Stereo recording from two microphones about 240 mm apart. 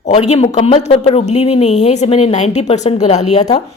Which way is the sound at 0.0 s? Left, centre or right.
Left.